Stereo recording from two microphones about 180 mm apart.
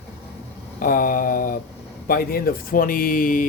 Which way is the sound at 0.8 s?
50° left (ahead or behind).